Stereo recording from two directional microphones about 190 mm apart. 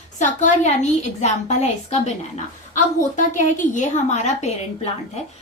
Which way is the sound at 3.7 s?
40° left (ahead or behind).